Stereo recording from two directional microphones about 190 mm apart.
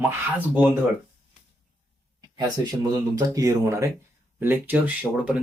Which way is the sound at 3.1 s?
15° right (ahead or behind).